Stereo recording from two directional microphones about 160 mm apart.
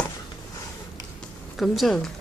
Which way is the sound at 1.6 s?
Centre (ahead or behind).